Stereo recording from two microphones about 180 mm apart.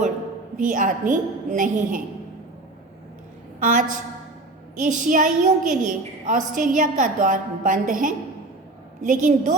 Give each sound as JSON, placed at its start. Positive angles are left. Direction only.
{"t": 0.5, "sound": "a woman's voice", "side_deg": -45}
{"t": 3.6, "sound": "a woman's voice", "side_deg": -45}